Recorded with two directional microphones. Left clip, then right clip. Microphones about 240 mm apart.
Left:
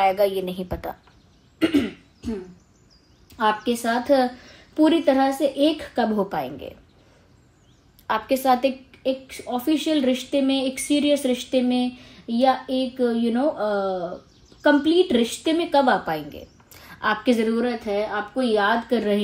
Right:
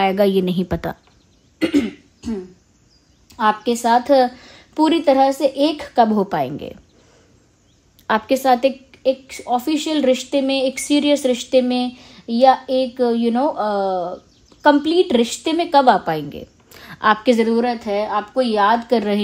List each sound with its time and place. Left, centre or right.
0.0 s a woman's voice: right
3.3 s a woman's voice: right
8.1 s a woman's voice: right